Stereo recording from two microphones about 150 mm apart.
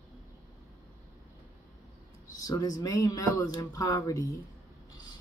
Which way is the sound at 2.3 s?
25° left (ahead or behind).